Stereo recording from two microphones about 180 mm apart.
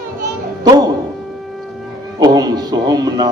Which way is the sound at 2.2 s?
20° right (ahead or behind).